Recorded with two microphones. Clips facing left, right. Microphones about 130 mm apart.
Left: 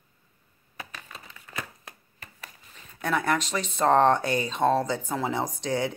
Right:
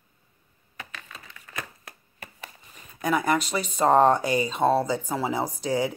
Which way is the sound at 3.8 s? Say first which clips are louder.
Right 1 dB; 10° right (ahead or behind).